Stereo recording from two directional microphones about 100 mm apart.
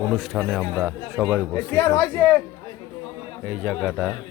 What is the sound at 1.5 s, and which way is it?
Speech, 20° left (ahead or behind).